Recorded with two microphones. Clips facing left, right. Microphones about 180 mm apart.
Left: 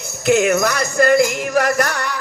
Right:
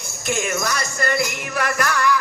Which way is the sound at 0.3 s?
65° left (ahead or behind).